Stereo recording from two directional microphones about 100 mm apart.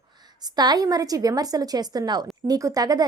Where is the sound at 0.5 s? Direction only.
40° right (ahead or behind).